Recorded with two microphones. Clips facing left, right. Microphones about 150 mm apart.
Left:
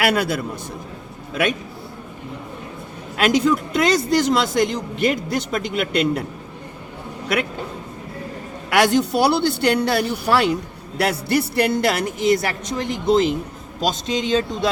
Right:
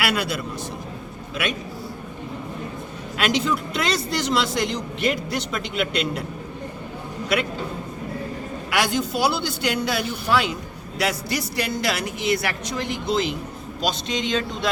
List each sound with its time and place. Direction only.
0.0 s a woman's voice: 50° left (ahead or behind)
3.2 s a woman's voice: 50° left (ahead or behind)
8.7 s a man's voice: 65° left (ahead or behind); by 14.7 s 35° left (ahead or behind)